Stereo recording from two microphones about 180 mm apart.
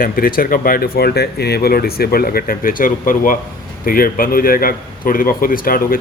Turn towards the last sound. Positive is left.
turn(degrees=50)  # may be behind; listen again after turning